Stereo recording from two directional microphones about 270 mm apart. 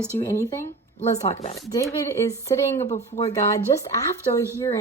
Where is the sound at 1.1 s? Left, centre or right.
Left.